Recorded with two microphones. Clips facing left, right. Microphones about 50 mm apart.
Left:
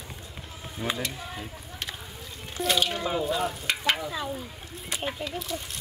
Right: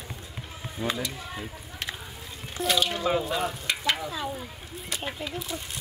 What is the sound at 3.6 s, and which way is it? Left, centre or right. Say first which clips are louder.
Speech: left 1 dB; centre.